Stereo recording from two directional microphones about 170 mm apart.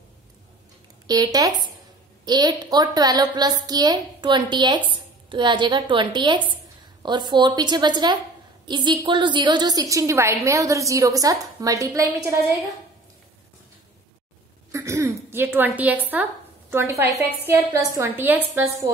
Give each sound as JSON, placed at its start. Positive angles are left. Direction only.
{"t": 1.0, "sound": "a woman's voice", "side_deg": -20}
{"t": 14.7, "sound": "a woman's voice", "side_deg": -20}